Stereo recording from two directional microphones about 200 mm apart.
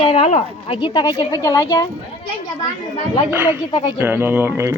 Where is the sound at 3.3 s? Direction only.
10° right (ahead or behind).